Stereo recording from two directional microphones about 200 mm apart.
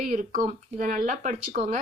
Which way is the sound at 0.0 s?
45° right (ahead or behind).